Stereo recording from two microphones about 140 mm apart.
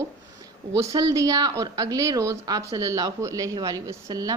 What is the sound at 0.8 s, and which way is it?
A woman's voice, 25° right (ahead or behind).